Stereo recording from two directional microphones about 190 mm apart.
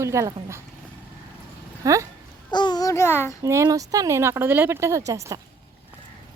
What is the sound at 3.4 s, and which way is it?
Speech, 15° right (ahead or behind).